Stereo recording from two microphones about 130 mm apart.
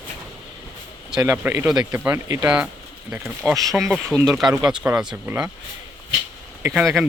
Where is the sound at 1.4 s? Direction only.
15° right (ahead or behind).